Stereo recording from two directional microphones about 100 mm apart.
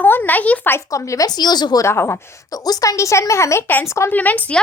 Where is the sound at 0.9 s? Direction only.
30° left (ahead or behind).